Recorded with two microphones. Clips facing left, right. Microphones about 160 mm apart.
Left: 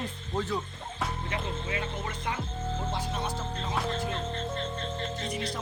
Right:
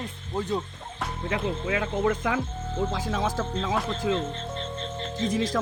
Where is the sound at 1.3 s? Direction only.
90° right.